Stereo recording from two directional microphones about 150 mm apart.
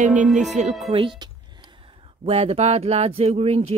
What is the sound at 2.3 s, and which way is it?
Speech, 45° right (ahead or behind).